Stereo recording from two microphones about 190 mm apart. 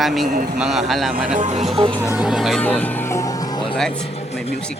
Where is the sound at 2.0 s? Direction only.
10° right (ahead or behind); by 4.4 s 25° left (ahead or behind).